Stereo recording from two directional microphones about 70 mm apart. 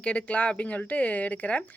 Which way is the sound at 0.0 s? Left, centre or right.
Centre.